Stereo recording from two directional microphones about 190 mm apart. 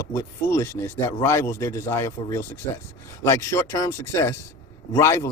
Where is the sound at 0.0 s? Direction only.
15° left (ahead or behind).